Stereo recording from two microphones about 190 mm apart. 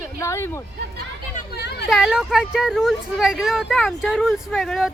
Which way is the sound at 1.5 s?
60° left (ahead or behind).